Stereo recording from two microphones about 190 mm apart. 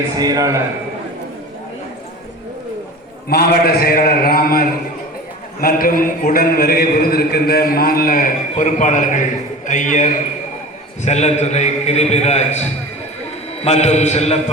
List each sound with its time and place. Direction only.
0.2 s a man's voice: 20° right (ahead or behind)
3.2 s a man's voice: 55° left (ahead or behind); by 14.3 s 35° left (ahead or behind)